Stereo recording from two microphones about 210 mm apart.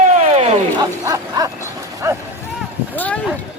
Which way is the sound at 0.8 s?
15° right (ahead or behind).